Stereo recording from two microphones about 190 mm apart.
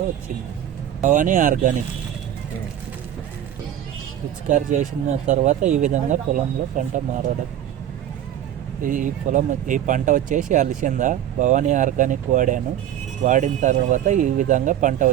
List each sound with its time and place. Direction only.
1.0 s speech: 45° right (ahead or behind)
4.4 s speech: 40° right (ahead or behind)
8.8 s speech: 45° right (ahead or behind)